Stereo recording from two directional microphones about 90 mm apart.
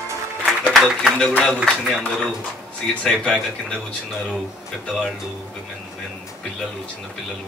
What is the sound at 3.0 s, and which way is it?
Speech, 10° left (ahead or behind).